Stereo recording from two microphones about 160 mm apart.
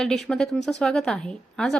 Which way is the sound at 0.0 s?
Centre (ahead or behind).